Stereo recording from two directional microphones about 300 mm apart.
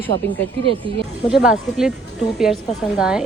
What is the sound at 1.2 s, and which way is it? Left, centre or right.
A woman's voice, centre.